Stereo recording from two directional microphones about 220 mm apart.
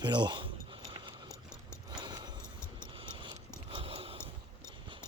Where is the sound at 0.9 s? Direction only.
20° right (ahead or behind).